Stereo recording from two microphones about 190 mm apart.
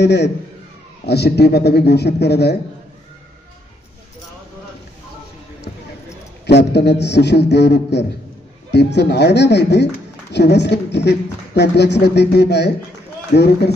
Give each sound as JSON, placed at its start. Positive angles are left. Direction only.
{"t": 0.0, "sound": "speech", "side_deg": 65}
{"t": 6.4, "sound": "speech", "side_deg": 60}